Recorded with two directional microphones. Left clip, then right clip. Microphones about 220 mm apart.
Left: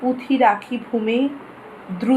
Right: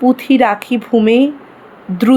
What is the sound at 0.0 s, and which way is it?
Speech, 50° right (ahead or behind).